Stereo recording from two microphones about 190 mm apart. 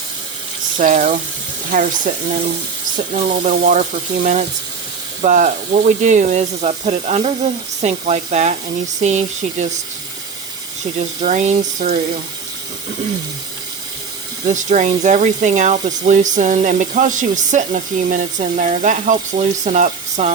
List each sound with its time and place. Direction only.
0.8 s speech: 45° right (ahead or behind)
11.2 s speech: 40° right (ahead or behind)
14.4 s speech: 40° right (ahead or behind)